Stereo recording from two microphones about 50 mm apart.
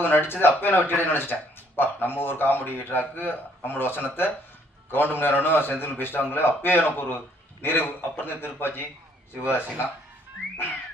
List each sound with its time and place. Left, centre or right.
0.0 s a man's voice: left